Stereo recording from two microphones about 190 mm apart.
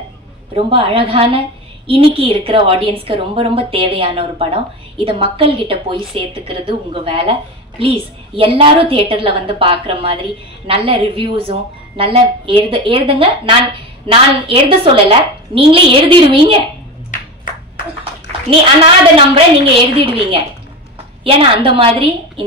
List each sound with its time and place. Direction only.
0.6 s a woman's voice: 30° right (ahead or behind)
19.3 s a woman's voice: 30° right (ahead or behind)